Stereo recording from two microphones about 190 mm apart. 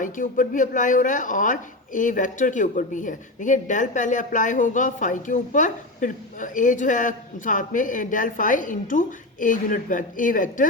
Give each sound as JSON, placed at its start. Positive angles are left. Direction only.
{"t": 0.0, "sound": "speech", "side_deg": 45}